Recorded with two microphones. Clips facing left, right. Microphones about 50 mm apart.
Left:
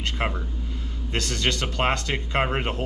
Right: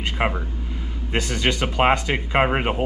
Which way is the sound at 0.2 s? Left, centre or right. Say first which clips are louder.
Right 4 dB; centre.